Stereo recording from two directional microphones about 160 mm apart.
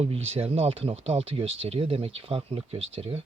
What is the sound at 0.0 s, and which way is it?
Speech, 40° right (ahead or behind).